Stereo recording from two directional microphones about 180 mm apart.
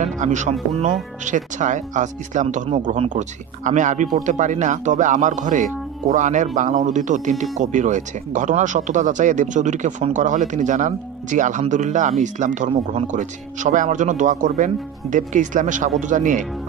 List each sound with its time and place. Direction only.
0.0 s speech: 40° right (ahead or behind)